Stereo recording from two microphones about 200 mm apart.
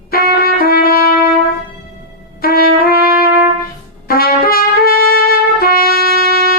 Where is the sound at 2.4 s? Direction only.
50° left (ahead or behind).